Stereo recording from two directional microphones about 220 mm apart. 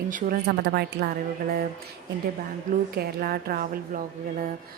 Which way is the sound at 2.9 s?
45° right (ahead or behind).